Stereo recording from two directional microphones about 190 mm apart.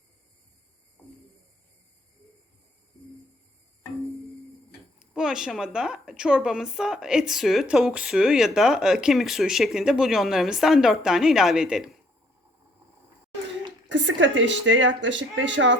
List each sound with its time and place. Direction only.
4.9 s a woman's voice: 5° right (ahead or behind)
13.8 s speech: 75° right (ahead or behind)